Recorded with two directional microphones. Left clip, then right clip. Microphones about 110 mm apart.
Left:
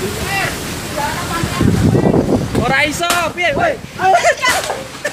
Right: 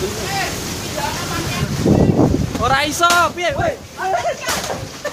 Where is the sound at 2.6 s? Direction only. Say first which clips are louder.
Right 2 dB; 35° right (ahead or behind).